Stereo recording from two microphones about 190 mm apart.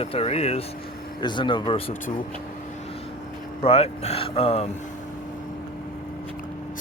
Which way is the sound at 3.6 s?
30° left (ahead or behind).